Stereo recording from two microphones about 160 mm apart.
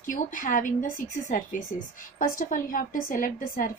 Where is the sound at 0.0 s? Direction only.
55° left (ahead or behind).